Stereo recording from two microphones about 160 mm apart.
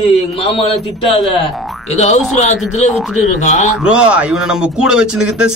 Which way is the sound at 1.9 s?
45° left (ahead or behind).